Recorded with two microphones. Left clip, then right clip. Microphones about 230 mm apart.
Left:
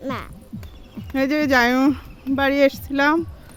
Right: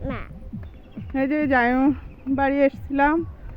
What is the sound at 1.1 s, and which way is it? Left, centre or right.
Speech, centre.